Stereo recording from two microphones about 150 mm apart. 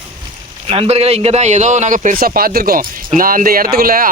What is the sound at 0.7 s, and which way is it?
A man's voice, 45° right (ahead or behind).